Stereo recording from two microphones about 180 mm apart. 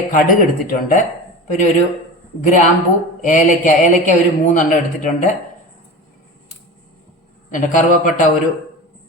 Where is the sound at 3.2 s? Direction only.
45° left (ahead or behind).